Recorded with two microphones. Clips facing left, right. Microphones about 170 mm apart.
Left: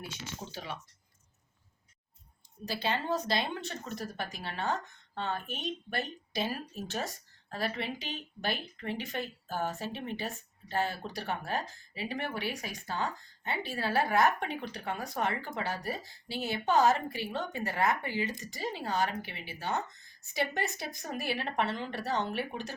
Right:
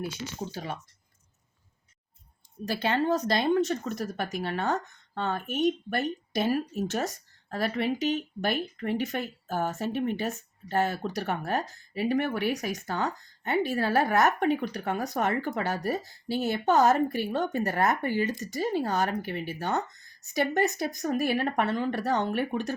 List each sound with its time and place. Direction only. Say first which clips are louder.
0.5 s speech: right 5 dB; 45° right (ahead or behind)
2.6 s speech: right 6 dB; 50° right (ahead or behind)